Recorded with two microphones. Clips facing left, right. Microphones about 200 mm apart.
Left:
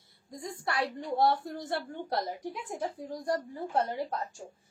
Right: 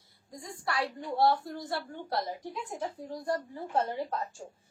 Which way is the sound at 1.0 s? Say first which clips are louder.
Right 1 dB; 20° left (ahead or behind).